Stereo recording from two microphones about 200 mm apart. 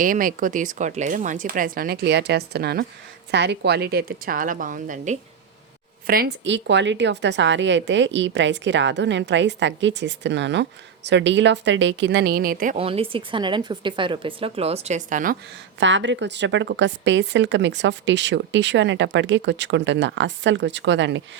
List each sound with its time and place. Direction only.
0.0 s a woman's voice: 45° right (ahead or behind)
12.7 s a woman's voice: 30° right (ahead or behind)
15.8 s speech: 65° right (ahead or behind)